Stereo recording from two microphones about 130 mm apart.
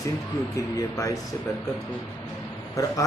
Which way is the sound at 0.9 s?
25° left (ahead or behind).